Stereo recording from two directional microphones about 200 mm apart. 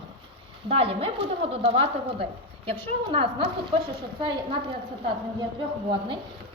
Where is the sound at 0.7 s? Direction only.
30° right (ahead or behind).